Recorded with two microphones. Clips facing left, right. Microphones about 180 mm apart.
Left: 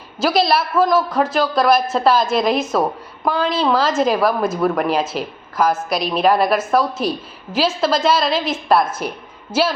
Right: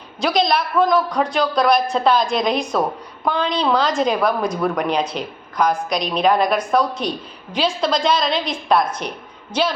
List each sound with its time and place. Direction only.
0.2 s a woman's voice: 5° left (ahead or behind)